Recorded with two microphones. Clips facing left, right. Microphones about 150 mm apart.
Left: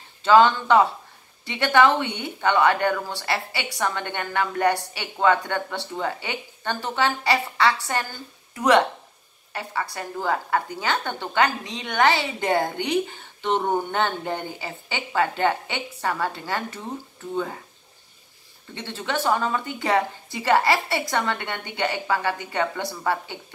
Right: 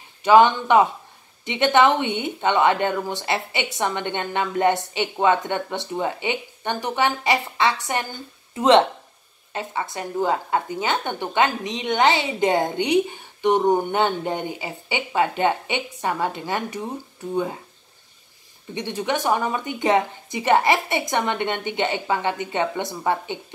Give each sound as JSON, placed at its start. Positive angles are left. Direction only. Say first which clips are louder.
{"t": 0.2, "sound": "a woman's voice", "louder": "right 2 dB", "side_deg": -20}
{"t": 18.8, "sound": "a woman's voice", "louder": "right 3 dB", "side_deg": -15}